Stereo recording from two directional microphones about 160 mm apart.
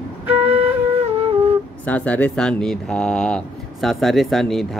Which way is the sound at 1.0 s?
40° right (ahead or behind).